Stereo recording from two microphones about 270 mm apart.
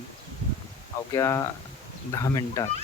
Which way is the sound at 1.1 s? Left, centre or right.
Centre.